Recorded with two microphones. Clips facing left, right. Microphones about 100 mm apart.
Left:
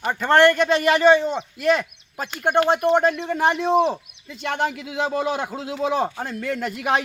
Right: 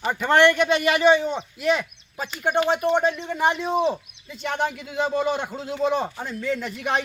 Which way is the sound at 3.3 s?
Centre (ahead or behind).